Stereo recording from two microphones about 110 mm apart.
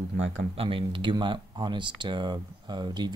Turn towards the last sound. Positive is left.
turn(degrees=-40)  # may be behind; listen again after turning